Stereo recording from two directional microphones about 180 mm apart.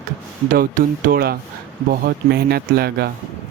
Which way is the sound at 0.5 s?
50° right (ahead or behind).